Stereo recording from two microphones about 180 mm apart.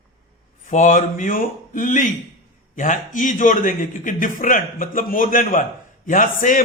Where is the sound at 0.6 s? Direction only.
45° left (ahead or behind).